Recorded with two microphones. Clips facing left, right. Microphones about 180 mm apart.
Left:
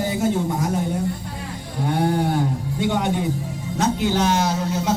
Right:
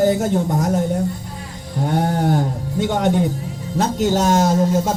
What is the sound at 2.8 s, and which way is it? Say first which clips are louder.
Speech: right 4 dB; 45° right (ahead or behind).